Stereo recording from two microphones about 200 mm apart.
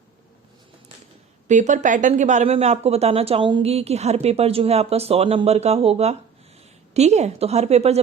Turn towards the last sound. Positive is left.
turn(degrees=-30)  # may be behind; listen again after turning